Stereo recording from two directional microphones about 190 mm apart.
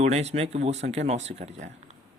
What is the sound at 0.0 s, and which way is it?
Speech, 35° right (ahead or behind).